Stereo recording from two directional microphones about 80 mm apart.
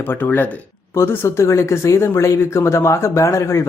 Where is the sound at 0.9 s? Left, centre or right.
Left.